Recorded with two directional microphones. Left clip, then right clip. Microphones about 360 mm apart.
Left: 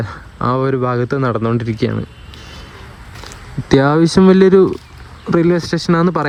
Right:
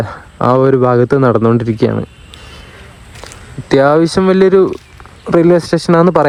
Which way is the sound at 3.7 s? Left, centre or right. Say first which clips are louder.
Right 4 dB; centre.